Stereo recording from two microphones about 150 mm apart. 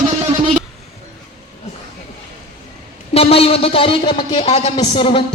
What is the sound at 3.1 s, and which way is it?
Speech, 40° left (ahead or behind).